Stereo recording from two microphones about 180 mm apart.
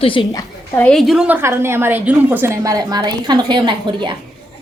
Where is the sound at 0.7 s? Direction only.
5° left (ahead or behind); by 4.1 s 25° right (ahead or behind).